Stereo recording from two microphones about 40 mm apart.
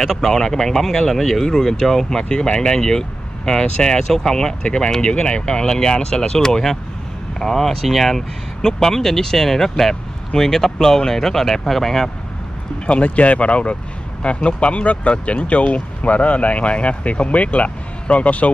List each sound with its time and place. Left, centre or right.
0.0 s speech: centre
12.8 s speech: left